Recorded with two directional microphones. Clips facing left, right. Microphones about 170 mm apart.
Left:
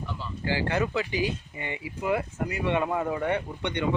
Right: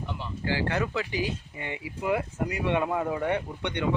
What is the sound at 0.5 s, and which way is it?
Speech, 5° left (ahead or behind).